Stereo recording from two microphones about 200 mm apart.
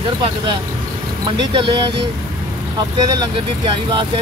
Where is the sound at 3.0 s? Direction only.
20° right (ahead or behind).